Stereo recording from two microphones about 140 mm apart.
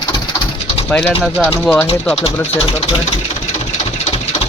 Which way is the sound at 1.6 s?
10° left (ahead or behind).